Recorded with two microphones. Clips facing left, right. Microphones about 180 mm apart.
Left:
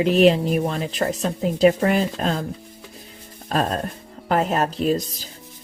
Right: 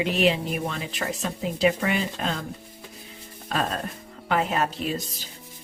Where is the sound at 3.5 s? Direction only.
40° left (ahead or behind).